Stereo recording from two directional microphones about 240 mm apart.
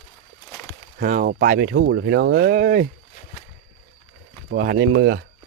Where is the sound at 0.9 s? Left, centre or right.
Right.